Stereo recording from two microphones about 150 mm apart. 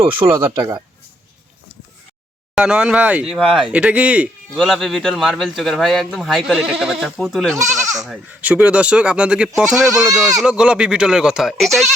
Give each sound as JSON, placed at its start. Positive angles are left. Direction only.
{"t": 0.0, "sound": "speech", "side_deg": -35}
{"t": 0.3, "sound": "speech", "side_deg": -15}
{"t": 2.6, "sound": "speech", "side_deg": -5}
{"t": 7.6, "sound": "speech", "side_deg": -20}
{"t": 8.0, "sound": "speech", "side_deg": -5}